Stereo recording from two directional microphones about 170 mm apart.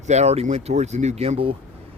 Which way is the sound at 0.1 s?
40° right (ahead or behind).